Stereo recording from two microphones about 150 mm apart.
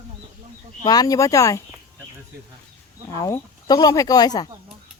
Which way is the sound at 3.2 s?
20° left (ahead or behind).